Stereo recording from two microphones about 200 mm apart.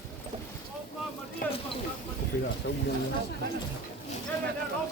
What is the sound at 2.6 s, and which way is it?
Speech, 60° left (ahead or behind).